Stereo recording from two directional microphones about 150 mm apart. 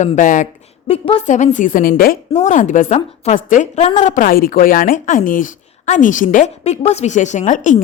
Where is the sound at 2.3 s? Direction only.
55° left (ahead or behind).